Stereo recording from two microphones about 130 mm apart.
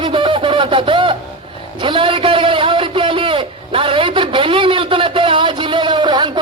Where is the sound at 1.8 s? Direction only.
40° right (ahead or behind).